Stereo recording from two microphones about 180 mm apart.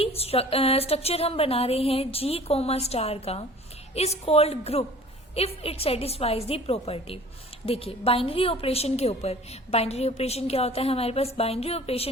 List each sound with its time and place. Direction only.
0.0 s a woman's voice: 35° left (ahead or behind)